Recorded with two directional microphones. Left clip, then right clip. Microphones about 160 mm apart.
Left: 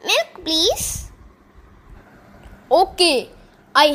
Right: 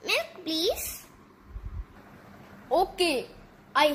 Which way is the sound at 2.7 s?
55° left (ahead or behind).